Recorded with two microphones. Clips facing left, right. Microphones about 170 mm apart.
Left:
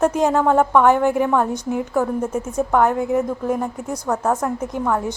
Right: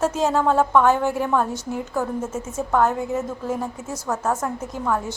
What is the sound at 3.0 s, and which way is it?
Speech, 65° left (ahead or behind).